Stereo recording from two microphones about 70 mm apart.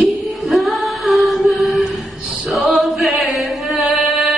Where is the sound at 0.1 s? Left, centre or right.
Centre.